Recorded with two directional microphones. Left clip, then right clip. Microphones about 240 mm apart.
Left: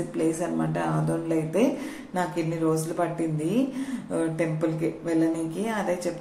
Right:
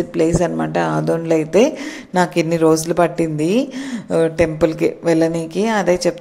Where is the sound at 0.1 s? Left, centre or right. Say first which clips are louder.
Right 10 dB; right.